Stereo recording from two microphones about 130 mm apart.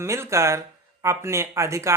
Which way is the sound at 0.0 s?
20° right (ahead or behind).